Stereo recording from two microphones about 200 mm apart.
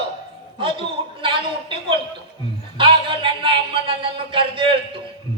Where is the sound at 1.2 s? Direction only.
25° right (ahead or behind).